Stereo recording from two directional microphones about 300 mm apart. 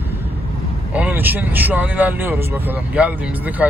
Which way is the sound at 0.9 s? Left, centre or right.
Centre.